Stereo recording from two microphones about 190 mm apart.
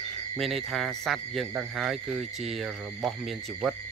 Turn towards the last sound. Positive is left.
turn(degrees=0)  # may be behind; listen again after turning